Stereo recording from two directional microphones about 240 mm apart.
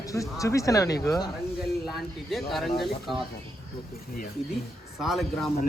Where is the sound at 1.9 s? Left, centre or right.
Centre.